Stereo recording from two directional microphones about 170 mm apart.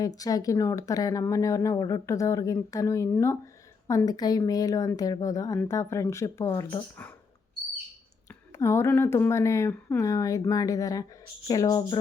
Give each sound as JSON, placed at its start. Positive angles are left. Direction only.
{"t": 0.0, "sound": "speech", "side_deg": 20}
{"t": 8.3, "sound": "speech", "side_deg": 15}